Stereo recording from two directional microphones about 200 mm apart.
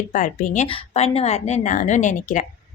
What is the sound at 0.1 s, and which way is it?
A woman's voice, 40° left (ahead or behind).